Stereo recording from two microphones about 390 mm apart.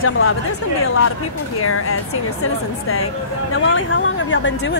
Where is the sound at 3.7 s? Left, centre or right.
Left.